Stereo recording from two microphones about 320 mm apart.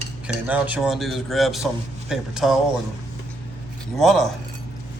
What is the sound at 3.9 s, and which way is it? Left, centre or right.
Speech, centre.